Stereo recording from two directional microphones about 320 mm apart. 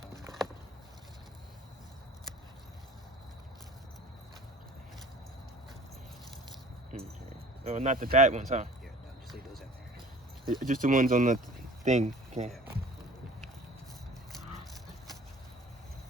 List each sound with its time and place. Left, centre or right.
6.9 s speech: right
9.3 s a sound: centre
10.5 s speech: right